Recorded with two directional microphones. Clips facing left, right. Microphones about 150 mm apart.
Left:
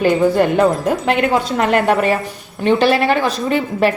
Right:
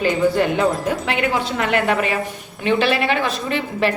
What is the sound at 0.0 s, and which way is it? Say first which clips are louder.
A woman's voice: left 4 dB; 50° left (ahead or behind).